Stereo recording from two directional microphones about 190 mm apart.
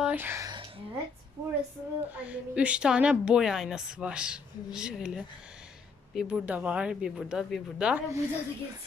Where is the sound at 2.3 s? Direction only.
5° right (ahead or behind).